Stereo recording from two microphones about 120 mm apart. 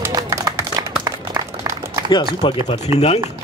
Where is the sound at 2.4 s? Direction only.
45° left (ahead or behind).